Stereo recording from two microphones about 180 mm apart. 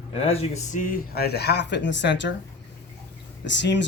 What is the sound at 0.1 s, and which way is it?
Speech, 35° left (ahead or behind).